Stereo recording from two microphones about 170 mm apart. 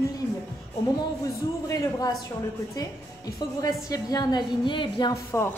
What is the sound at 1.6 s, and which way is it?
A woman's voice, 20° left (ahead or behind).